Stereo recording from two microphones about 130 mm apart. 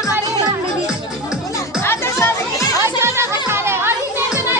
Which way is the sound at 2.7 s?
20° right (ahead or behind).